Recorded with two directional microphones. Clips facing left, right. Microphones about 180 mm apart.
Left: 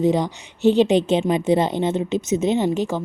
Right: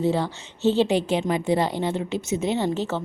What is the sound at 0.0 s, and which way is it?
Speech, 15° left (ahead or behind).